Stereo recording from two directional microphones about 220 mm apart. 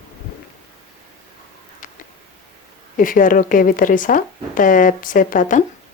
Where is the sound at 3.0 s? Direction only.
40° left (ahead or behind).